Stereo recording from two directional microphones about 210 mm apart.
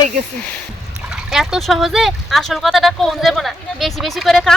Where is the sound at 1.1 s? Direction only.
Centre (ahead or behind).